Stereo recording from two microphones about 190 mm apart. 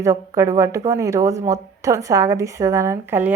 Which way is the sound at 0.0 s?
15° right (ahead or behind).